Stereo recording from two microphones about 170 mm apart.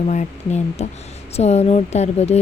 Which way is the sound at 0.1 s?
40° left (ahead or behind).